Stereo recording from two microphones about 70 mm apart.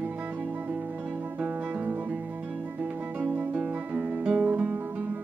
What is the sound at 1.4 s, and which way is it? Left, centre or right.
Guitar, right.